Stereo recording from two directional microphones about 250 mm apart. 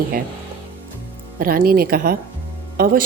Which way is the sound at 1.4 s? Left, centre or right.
Right.